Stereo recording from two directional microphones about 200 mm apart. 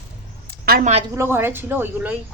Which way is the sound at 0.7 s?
45° right (ahead or behind).